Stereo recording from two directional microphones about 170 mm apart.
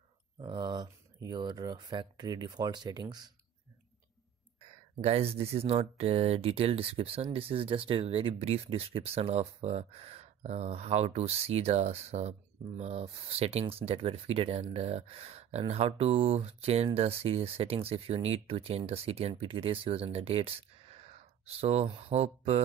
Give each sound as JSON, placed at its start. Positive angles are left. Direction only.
{"t": 0.4, "sound": "speech", "side_deg": -25}
{"t": 5.0, "sound": "speech", "side_deg": -35}